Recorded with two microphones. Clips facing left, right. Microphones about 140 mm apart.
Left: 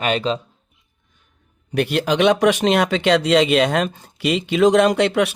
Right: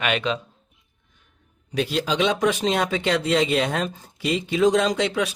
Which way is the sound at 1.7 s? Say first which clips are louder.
Left 5 dB; 65° left (ahead or behind).